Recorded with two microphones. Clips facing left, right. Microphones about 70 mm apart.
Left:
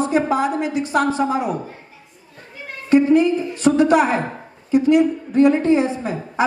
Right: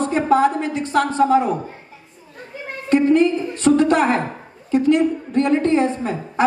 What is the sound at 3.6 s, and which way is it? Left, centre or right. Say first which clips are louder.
A woman's voice: even; centre.